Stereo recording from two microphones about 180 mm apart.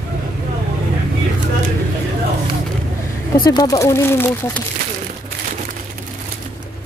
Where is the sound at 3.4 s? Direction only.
20° left (ahead or behind).